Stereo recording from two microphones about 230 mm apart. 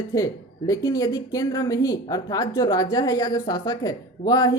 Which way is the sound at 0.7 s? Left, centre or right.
Centre.